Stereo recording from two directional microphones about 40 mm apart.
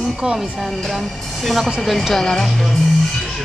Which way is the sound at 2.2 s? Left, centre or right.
Centre.